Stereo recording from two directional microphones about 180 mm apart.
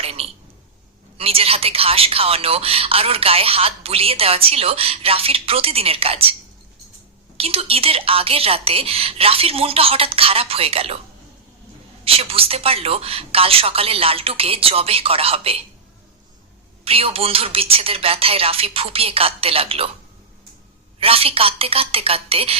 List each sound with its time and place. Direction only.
0.0 s a sound: 35° right (ahead or behind)
1.2 s a woman's voice: 30° right (ahead or behind)
7.3 s a woman's voice: 35° right (ahead or behind)
12.0 s a woman's voice: 35° right (ahead or behind)
16.8 s a woman's voice: 30° right (ahead or behind)
21.0 s a woman's voice: 30° right (ahead or behind)